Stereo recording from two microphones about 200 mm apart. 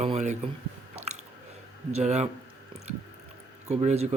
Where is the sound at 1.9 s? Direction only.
35° right (ahead or behind).